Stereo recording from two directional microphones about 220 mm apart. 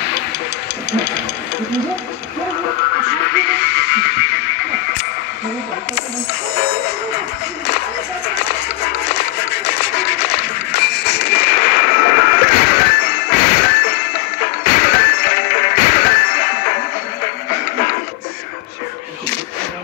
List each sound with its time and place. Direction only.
3.3 s music: 50° left (ahead or behind)
8.4 s music: 50° left (ahead or behind)
10.7 s a sound: 50° left (ahead or behind)